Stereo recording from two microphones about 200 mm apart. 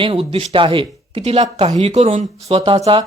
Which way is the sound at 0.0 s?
25° right (ahead or behind).